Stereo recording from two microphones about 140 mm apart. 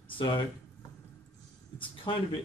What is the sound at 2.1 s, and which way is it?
Speech, 30° left (ahead or behind).